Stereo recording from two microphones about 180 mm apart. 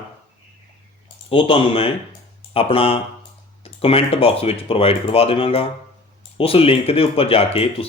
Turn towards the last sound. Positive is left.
turn(degrees=30)  # may be behind; listen again after turning